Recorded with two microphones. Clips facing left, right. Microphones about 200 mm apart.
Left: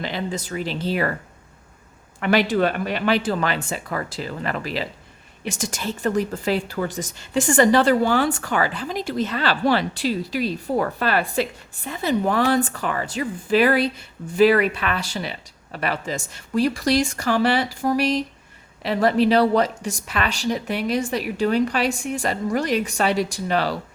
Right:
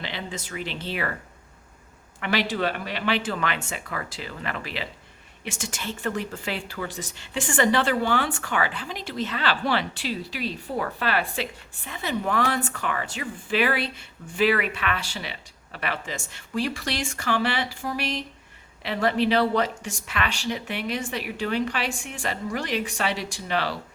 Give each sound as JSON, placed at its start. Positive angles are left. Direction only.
{"t": 0.0, "sound": "a woman's voice", "side_deg": 40}
{"t": 2.2, "sound": "a woman's voice", "side_deg": 50}